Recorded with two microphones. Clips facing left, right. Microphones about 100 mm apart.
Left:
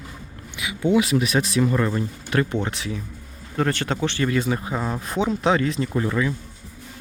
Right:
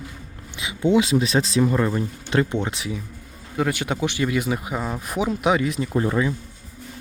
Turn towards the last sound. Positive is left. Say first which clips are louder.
# right 1 dB
turn(degrees=-25)  # may be behind; listen again after turning